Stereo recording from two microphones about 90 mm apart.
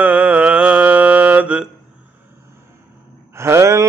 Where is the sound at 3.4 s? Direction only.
30° right (ahead or behind).